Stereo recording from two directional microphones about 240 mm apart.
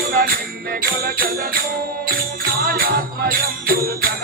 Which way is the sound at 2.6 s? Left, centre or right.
Right.